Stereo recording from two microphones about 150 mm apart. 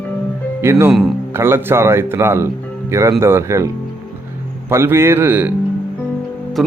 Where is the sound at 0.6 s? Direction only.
15° right (ahead or behind).